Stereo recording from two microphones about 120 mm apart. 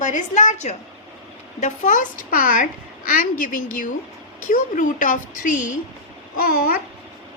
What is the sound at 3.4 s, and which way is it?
A woman's voice, 90° left.